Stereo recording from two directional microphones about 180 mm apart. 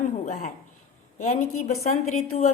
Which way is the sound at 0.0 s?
45° left (ahead or behind).